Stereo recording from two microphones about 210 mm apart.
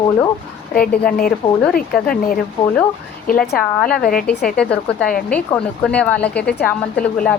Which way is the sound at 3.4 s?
Centre (ahead or behind).